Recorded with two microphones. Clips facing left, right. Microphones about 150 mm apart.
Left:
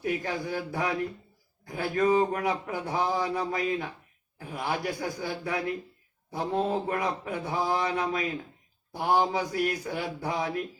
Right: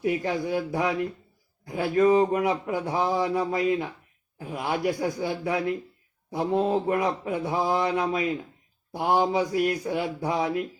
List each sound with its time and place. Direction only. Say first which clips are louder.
0.0 s speech: right 4 dB; 20° right (ahead or behind)